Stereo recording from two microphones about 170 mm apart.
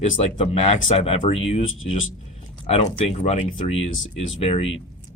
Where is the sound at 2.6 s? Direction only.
45° left (ahead or behind).